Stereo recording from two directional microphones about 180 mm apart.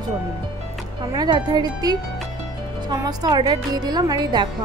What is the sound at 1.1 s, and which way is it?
A woman's voice, 25° right (ahead or behind).